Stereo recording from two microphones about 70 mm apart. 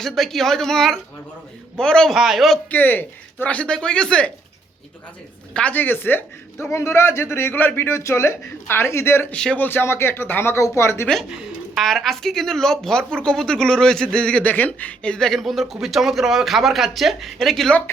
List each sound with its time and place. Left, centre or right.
0.0 s speech: centre
2.1 s speech: centre
2.6 s speech: left
5.5 s a woman's voice: left
6.6 s speech: left
9.3 s speech: centre
9.6 s speech: left
11.7 s speech: centre
15.3 s speech: centre